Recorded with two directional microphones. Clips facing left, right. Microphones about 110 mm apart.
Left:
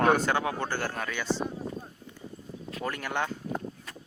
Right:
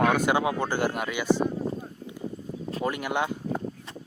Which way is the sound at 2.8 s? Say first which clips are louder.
Right 4 dB; 15° right (ahead or behind).